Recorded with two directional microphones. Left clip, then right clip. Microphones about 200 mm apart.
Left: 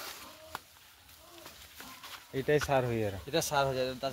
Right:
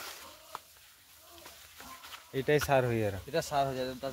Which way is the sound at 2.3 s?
15° right (ahead or behind).